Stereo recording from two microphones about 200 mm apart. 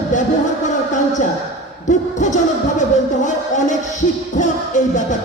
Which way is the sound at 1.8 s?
40° left (ahead or behind).